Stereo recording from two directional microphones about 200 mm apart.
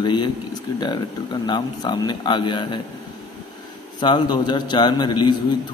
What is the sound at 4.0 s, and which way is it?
Speech, 20° left (ahead or behind).